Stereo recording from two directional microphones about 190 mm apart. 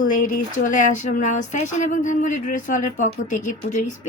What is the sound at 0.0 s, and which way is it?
Speech, 45° left (ahead or behind).